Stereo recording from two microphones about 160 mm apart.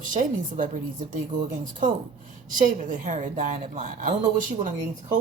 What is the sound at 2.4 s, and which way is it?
A woman's voice, 55° right (ahead or behind).